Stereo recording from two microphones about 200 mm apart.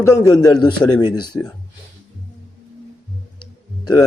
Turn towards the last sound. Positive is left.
turn(degrees=20)  # may be behind; listen again after turning